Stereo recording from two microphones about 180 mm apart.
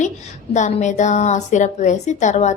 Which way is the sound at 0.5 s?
40° left (ahead or behind).